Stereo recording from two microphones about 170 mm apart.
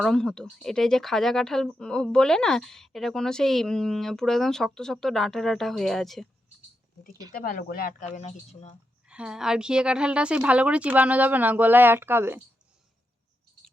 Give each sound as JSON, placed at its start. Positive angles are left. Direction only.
{"t": 0.0, "sound": "speech", "side_deg": 5}
{"t": 7.4, "sound": "speech", "side_deg": 55}
{"t": 9.0, "sound": "a woman's voice", "side_deg": -5}